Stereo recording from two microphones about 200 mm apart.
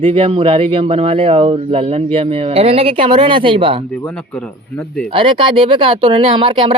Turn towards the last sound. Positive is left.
turn(degrees=-25)  # may be behind; listen again after turning